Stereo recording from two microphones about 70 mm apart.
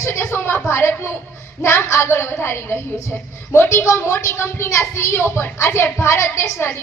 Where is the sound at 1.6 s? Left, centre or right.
Left.